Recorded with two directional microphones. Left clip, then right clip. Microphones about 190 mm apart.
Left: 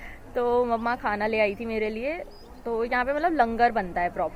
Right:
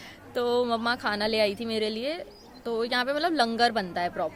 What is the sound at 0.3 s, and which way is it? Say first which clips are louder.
A woman's voice: left 2 dB; 15° right (ahead or behind).